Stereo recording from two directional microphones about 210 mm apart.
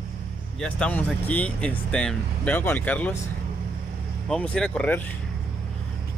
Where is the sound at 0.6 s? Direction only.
5° left (ahead or behind).